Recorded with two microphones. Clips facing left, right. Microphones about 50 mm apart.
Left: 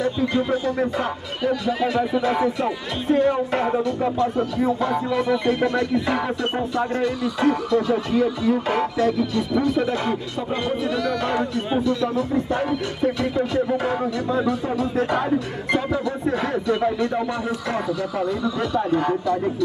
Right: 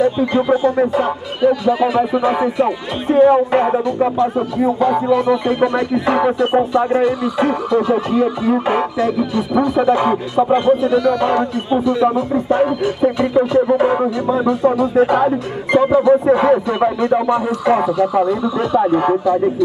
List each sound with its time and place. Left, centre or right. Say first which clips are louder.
0.0 s speech: right 7 dB; centre
9.9 s speech: right 10 dB; right
10.9 s speech: right 8 dB; centre
11.8 s speech: right 7 dB; right
15.8 s speech: right 12 dB; right